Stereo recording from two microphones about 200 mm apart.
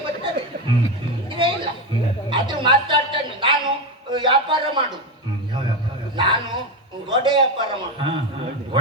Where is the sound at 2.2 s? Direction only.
25° right (ahead or behind).